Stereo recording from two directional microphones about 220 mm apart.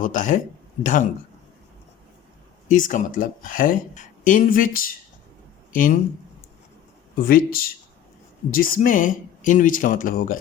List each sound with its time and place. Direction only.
0.0 s speech: 35° left (ahead or behind)
2.6 s speech: 35° left (ahead or behind)
7.2 s speech: 40° left (ahead or behind)